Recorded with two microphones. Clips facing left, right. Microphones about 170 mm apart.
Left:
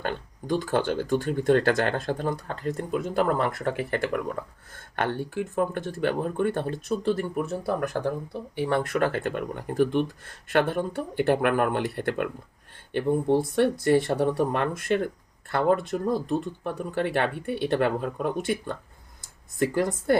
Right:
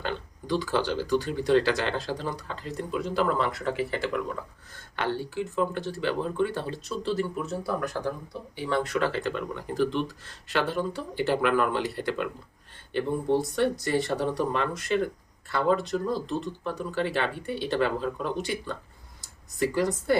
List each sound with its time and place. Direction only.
0.0 s speech: 50° left (ahead or behind)
13.6 s speech: 55° left (ahead or behind)